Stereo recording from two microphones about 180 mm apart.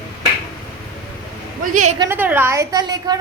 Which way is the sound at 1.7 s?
45° right (ahead or behind).